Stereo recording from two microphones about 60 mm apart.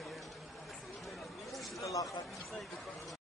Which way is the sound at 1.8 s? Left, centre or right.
Left.